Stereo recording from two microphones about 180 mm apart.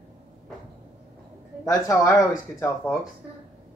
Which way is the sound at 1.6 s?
20° left (ahead or behind).